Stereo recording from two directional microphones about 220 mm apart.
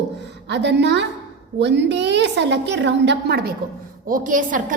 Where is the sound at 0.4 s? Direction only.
50° right (ahead or behind).